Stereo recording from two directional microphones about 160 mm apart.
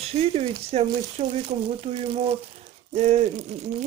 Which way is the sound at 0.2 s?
40° right (ahead or behind).